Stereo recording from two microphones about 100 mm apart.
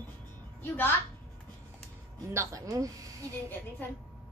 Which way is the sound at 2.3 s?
35° right (ahead or behind).